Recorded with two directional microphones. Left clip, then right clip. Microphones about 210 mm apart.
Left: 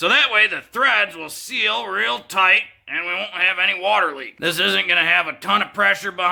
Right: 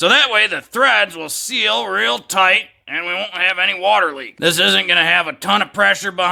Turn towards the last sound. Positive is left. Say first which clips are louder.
# right 3 dB
turn(degrees=-60)  # may be behind; listen again after turning